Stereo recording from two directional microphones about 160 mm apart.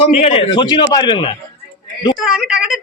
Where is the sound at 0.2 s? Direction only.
40° left (ahead or behind).